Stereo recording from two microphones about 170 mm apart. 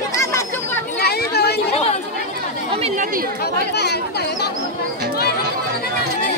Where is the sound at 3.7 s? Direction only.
75° left (ahead or behind).